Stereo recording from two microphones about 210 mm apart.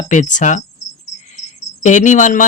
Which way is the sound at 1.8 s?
35° left (ahead or behind).